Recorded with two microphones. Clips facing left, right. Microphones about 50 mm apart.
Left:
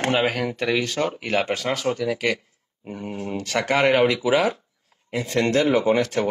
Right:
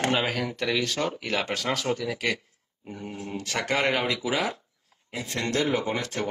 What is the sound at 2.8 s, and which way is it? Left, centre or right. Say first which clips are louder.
Speech: left 6 dB; left.